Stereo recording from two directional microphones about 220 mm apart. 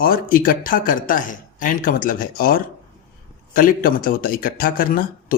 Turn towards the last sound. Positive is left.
turn(degrees=40)  # may be behind; listen again after turning